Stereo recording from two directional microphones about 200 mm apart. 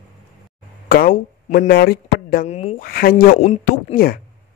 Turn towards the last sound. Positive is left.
turn(degrees=50)  # may be behind; listen again after turning